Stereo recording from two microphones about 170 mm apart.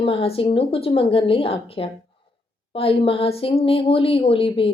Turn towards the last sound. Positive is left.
turn(degrees=35)  # may be behind; listen again after turning